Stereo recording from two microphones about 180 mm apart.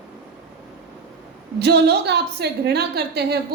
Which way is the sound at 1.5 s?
65° right (ahead or behind).